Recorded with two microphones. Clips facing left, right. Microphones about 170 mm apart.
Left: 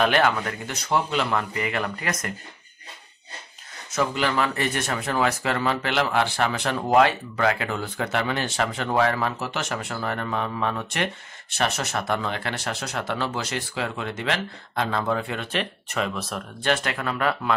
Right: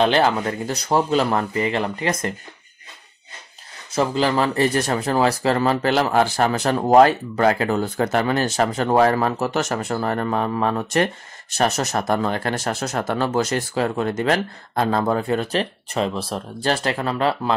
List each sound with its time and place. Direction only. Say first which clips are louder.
0.0 s speech: right 3 dB; 30° right (ahead or behind)
3.9 s speech: right 4 dB; 30° right (ahead or behind)